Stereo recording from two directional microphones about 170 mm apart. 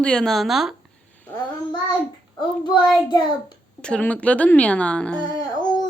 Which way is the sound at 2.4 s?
25° left (ahead or behind).